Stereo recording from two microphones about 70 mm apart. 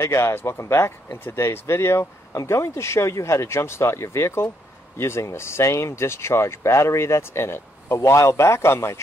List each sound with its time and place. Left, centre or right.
0.0 s speech: left